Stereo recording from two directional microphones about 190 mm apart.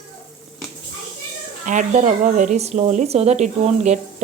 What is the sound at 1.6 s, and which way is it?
A woman's voice, 40° right (ahead or behind).